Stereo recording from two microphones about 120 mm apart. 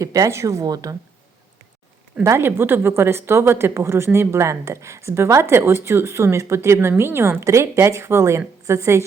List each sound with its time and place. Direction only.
0.0 s a woman's voice: 30° right (ahead or behind)
2.2 s a woman's voice: 20° right (ahead or behind)